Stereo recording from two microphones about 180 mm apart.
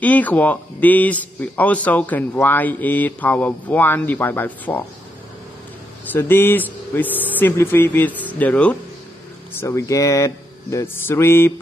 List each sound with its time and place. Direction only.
0.0 s a man's voice: 10° left (ahead or behind)
6.1 s a man's voice: 10° left (ahead or behind)